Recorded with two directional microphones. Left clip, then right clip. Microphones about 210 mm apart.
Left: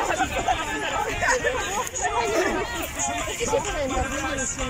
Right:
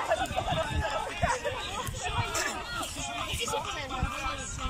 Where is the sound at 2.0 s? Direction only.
40° left (ahead or behind).